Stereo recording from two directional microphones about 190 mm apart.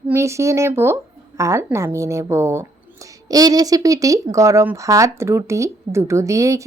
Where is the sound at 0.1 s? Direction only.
15° right (ahead or behind).